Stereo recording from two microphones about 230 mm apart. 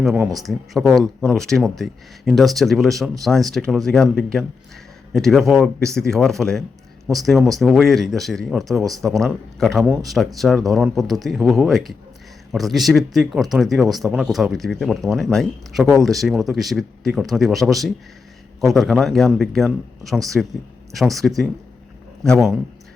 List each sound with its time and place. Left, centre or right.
0.0 s speech: centre